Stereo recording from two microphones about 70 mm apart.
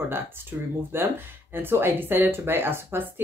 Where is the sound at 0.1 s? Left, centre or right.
Right.